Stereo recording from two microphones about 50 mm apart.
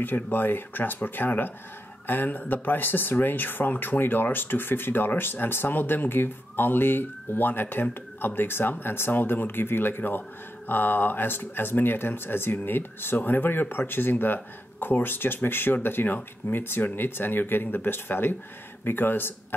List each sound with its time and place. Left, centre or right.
0.0 s speech: left